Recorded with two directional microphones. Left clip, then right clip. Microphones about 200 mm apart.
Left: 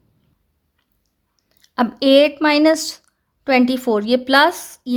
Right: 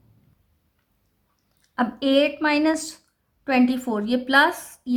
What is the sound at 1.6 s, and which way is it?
Speech, 40° left (ahead or behind).